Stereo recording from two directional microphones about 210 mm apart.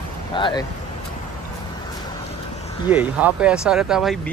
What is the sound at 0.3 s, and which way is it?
Speech, 20° left (ahead or behind).